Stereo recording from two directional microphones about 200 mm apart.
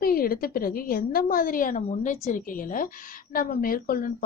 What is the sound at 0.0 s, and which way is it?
A woman's voice, 45° left (ahead or behind).